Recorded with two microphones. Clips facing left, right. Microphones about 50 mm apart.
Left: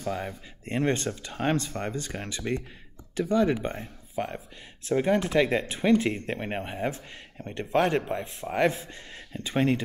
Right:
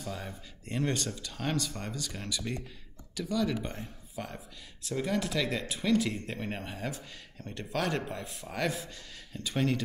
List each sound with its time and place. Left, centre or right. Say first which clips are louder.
0.0 s speech: left 8 dB; left